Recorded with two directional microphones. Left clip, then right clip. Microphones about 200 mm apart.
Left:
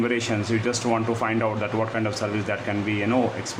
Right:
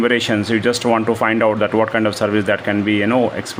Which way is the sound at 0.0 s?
40° right (ahead or behind).